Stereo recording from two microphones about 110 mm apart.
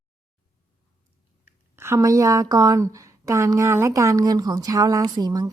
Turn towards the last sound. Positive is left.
turn(degrees=-35)  # may be behind; listen again after turning